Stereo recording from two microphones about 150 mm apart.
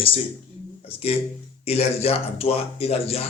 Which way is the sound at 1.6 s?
45° left (ahead or behind).